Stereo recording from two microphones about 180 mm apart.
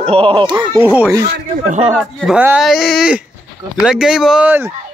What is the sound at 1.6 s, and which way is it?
Speech, 40° right (ahead or behind).